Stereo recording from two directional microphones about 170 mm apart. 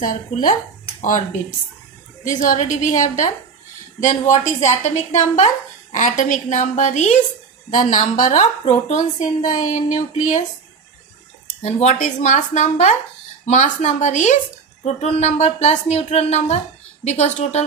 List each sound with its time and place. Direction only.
0.0 s a woman's voice: 50° left (ahead or behind)
2.2 s a woman's voice: 45° left (ahead or behind)
11.6 s a woman's voice: 40° left (ahead or behind)